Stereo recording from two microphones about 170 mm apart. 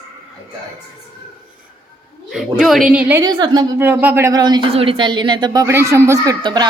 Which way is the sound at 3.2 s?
25° right (ahead or behind).